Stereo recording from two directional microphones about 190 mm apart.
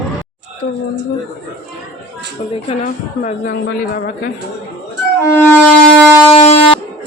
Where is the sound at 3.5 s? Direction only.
55° left (ahead or behind).